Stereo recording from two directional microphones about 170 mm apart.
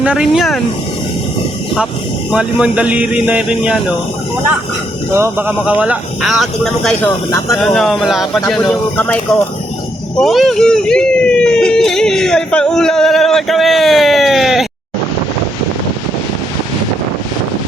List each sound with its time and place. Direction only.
0.0 s speech: 5° right (ahead or behind)
2.3 s speech: 5° right (ahead or behind)
5.1 s speech: 15° right (ahead or behind)
7.3 s speech: 20° left (ahead or behind)
7.6 s speech: centre (ahead or behind)